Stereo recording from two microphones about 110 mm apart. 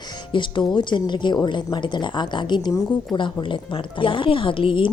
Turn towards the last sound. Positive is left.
turn(degrees=50)  # may be behind; listen again after turning